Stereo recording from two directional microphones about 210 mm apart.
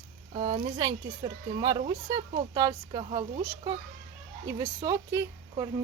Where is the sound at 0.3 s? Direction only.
25° right (ahead or behind).